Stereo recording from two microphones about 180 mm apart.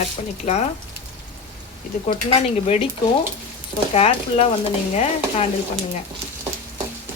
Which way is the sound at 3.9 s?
35° left (ahead or behind).